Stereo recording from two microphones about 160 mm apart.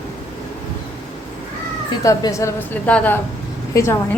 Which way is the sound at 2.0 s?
20° left (ahead or behind).